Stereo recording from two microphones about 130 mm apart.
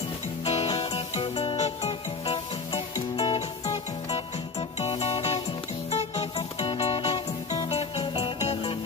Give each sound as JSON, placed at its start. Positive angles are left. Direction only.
{"t": 0.5, "sound": "music", "side_deg": 45}
{"t": 3.3, "sound": "music", "side_deg": 50}
{"t": 8.0, "sound": "music", "side_deg": 35}
{"t": 8.4, "sound": "music", "side_deg": 55}